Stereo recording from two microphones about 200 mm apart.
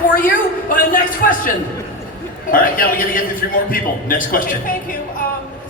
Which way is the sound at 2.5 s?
45° left (ahead or behind).